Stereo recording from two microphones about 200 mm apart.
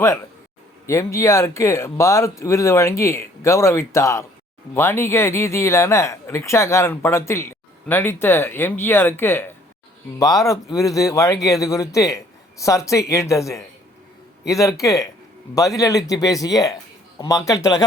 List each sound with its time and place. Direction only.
0.9 s speech: 15° left (ahead or behind)